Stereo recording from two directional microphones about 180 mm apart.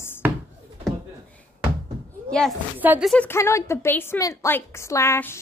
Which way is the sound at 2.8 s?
10° right (ahead or behind).